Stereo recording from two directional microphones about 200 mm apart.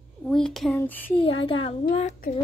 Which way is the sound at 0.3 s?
Centre (ahead or behind).